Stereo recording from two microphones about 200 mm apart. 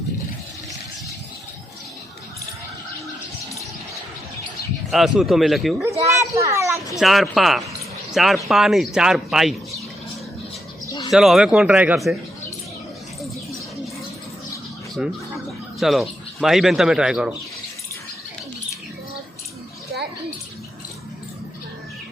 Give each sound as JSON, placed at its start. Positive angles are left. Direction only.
{"t": 4.9, "sound": "speech", "side_deg": 0}
{"t": 5.8, "sound": "children playing", "side_deg": -15}
{"t": 6.9, "sound": "speech", "side_deg": 0}
{"t": 10.8, "sound": "bird", "side_deg": 20}
{"t": 11.1, "sound": "speech", "side_deg": 0}
{"t": 15.0, "sound": "speech", "side_deg": -5}